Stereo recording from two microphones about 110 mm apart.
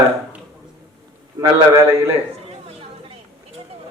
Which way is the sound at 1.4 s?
25° right (ahead or behind).